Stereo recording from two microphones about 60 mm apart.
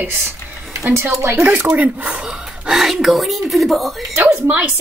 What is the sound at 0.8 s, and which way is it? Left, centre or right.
Speech, right.